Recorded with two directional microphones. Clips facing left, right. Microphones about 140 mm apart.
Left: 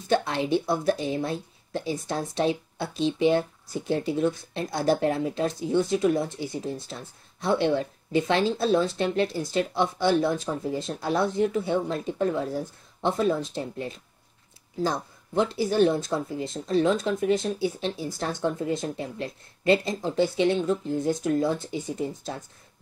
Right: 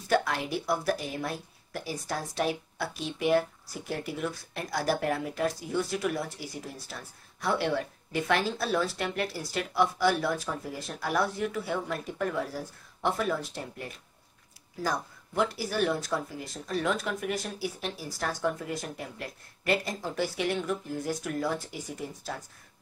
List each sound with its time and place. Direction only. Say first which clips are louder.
0.1 s a woman's voice: left 4 dB; 25° left (ahead or behind)